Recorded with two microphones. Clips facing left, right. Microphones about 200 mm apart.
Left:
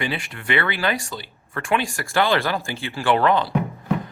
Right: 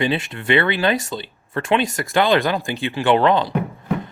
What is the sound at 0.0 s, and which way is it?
Speech, 25° right (ahead or behind).